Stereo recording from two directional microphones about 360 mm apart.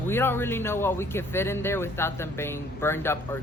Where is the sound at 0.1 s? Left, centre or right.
Centre.